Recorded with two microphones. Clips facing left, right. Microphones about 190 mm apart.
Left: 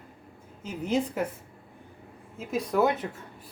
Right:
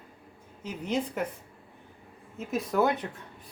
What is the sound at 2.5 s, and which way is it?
Speech, centre (ahead or behind).